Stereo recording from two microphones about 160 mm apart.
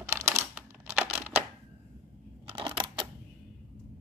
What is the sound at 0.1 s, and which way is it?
Computer keyboard, 15° right (ahead or behind).